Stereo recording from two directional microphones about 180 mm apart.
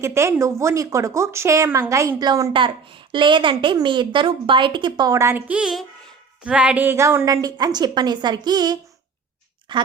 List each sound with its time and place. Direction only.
0.0 s speech: 15° right (ahead or behind)